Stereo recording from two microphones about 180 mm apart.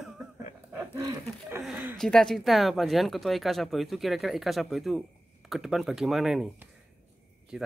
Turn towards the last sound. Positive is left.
turn(degrees=-5)  # may be behind; listen again after turning